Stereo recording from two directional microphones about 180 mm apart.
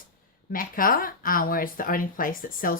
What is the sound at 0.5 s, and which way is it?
Speech, 50° left (ahead or behind).